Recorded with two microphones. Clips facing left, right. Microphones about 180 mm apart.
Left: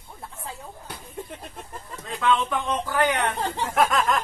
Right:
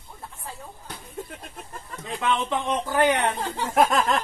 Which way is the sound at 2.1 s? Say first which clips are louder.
Left 2 dB; 20° right (ahead or behind).